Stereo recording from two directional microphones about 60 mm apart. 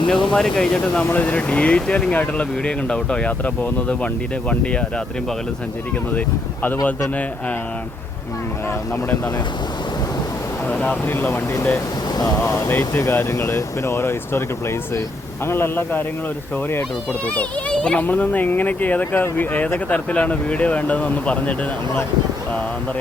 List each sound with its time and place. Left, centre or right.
0.1 s speech: centre
1.1 s speech: left
6.1 s speech: left
11.1 s a man's voice: left
12.5 s a man's voice: left
17.2 s speech: centre